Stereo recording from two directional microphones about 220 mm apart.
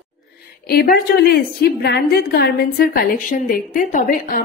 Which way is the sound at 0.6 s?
45° left (ahead or behind).